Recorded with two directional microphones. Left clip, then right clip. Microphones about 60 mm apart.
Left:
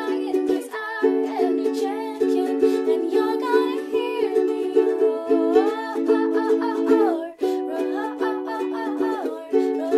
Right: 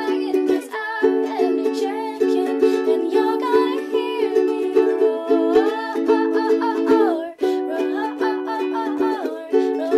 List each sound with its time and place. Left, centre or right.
0.1 s music: right
9.0 s music: right